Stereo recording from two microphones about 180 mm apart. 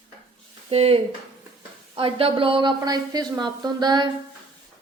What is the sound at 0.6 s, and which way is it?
Speech, 35° right (ahead or behind).